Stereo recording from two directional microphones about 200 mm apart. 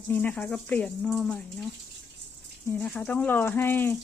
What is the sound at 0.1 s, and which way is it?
Speech, 5° left (ahead or behind).